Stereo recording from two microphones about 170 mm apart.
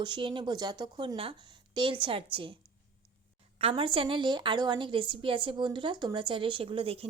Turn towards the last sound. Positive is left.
turn(degrees=-35)  # may be behind; listen again after turning